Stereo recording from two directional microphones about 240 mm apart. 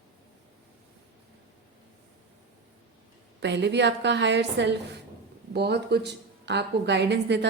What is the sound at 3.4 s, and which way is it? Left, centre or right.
A woman's voice, right.